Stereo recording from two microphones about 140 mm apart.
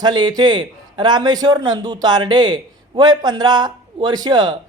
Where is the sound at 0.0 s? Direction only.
30° right (ahead or behind).